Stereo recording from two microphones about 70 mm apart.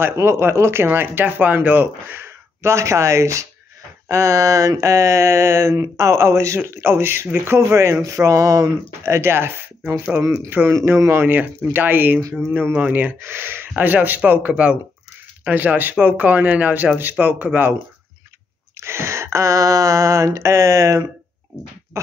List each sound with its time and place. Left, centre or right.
0.0 s speech: right
9.0 s speech: right
18.8 s a sound: right